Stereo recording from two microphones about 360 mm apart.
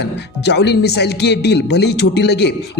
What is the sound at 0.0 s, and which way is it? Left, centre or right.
Speech, left.